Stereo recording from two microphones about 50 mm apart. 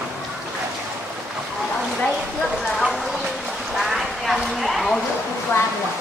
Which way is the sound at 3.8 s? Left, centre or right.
Centre.